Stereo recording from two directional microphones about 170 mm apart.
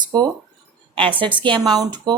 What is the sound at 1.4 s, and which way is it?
Speech, 30° right (ahead or behind).